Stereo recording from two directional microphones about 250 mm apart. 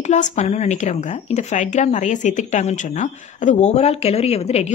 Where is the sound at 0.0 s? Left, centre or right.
Left.